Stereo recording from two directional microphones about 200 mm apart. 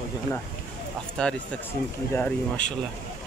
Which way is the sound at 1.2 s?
5° left (ahead or behind).